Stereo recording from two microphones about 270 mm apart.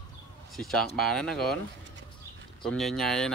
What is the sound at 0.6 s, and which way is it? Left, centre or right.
Speech, centre.